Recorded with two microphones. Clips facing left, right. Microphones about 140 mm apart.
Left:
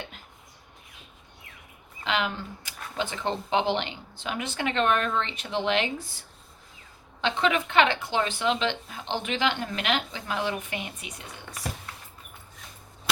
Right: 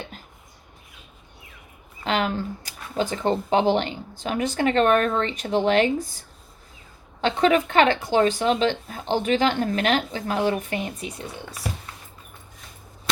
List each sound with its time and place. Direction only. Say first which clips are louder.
2.0 s speech: right 5 dB; 45° right (ahead or behind)